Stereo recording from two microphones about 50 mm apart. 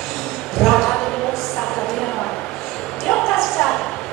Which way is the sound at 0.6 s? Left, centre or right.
Centre.